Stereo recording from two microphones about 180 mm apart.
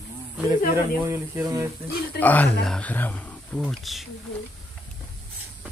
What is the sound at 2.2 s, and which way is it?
Speech, 10° left (ahead or behind).